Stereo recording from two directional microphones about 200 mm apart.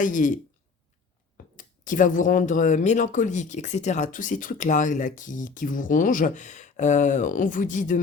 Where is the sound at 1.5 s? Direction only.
40° left (ahead or behind).